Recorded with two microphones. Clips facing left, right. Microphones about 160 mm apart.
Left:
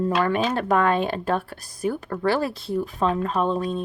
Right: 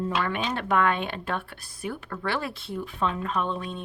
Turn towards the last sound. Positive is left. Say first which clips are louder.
# left 6 dB
turn(degrees=40)  # may be behind; listen again after turning